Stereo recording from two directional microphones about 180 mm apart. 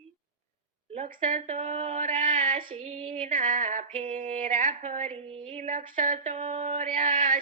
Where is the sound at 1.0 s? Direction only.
45° right (ahead or behind).